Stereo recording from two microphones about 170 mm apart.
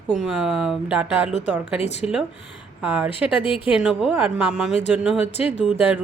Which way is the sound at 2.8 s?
5° right (ahead or behind).